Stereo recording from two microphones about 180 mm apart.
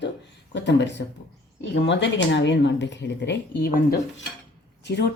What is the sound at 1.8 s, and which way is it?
Speech, 85° left.